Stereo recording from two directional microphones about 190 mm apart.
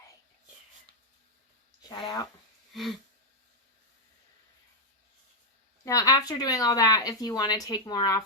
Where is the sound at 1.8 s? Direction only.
20° left (ahead or behind).